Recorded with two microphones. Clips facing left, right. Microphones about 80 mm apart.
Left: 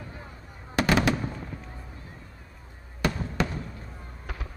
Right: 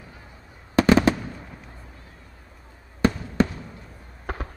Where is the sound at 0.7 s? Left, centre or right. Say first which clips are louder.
Right 6 dB; right.